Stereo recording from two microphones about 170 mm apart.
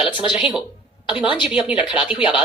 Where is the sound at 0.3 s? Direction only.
5° right (ahead or behind).